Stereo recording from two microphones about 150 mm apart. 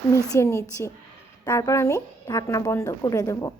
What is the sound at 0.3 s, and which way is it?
A woman's voice, 20° left (ahead or behind).